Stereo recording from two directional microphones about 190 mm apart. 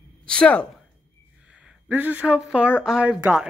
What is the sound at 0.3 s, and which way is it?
Speech, 5° left (ahead or behind).